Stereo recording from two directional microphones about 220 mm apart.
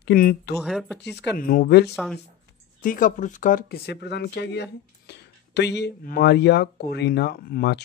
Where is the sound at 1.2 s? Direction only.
40° left (ahead or behind).